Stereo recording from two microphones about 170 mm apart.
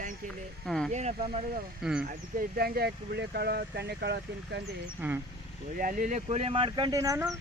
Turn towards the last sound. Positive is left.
turn(degrees=-20)  # may be behind; listen again after turning